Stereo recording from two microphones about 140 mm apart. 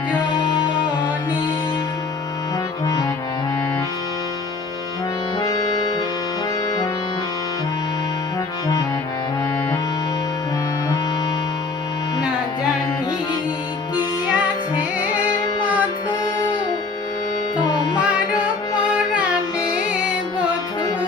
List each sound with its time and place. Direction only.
0.3 s music: 35° left (ahead or behind)
5.4 s accordion: 25° left (ahead or behind)
13.9 s music: 10° right (ahead or behind)
17.6 s music: 30° left (ahead or behind)